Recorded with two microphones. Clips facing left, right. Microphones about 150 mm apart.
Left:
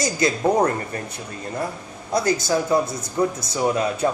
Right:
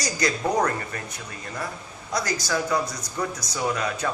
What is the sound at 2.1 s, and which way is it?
Speech, 25° left (ahead or behind).